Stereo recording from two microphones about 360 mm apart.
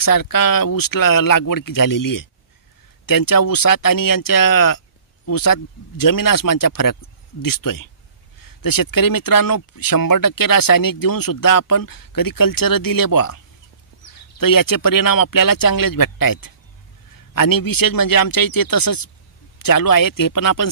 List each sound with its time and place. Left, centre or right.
0.0 s speech: left
14.4 s speech: left